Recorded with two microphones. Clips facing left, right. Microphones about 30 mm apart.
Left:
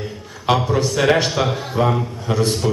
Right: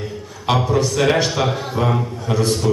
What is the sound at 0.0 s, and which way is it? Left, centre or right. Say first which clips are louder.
A man's voice: even; centre.